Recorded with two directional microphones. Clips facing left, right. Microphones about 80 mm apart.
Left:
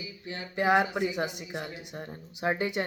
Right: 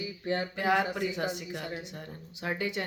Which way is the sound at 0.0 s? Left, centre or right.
Right.